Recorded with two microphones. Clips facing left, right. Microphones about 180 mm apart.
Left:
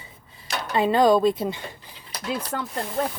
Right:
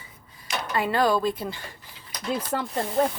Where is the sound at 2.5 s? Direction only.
5° right (ahead or behind).